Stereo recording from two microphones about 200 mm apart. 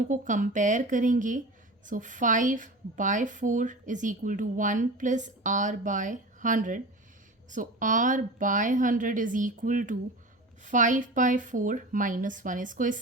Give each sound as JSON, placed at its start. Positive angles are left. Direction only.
{"t": 0.0, "sound": "a woman's voice", "side_deg": -40}